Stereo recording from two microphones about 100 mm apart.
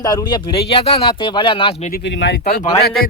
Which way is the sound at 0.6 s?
75° left (ahead or behind).